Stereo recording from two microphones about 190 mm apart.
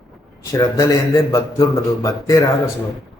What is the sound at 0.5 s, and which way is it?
Speech, 15° left (ahead or behind).